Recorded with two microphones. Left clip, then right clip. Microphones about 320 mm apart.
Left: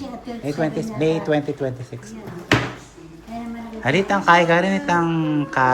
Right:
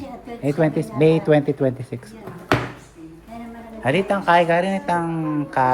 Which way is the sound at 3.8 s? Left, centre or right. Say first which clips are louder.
Left 2 dB; centre.